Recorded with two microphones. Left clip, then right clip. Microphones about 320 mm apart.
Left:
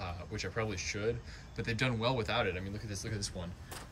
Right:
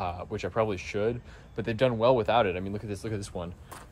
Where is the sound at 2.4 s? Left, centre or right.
Right.